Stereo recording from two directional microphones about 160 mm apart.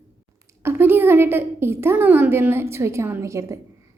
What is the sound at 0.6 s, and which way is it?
A woman's voice, 15° right (ahead or behind).